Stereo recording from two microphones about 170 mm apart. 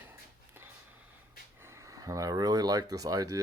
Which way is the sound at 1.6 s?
15° right (ahead or behind).